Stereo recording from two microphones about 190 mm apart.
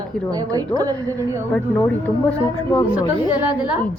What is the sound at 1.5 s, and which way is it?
Speech, 5° left (ahead or behind).